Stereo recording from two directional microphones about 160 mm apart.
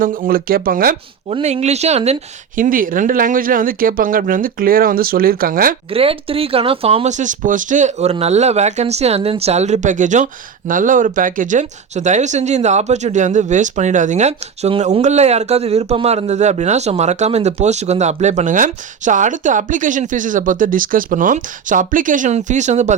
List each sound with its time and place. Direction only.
0.0 s speech: 60° right (ahead or behind)
1.3 s speech: 40° right (ahead or behind)
2.6 s speech: 60° right (ahead or behind)
5.9 s speech: 35° right (ahead or behind)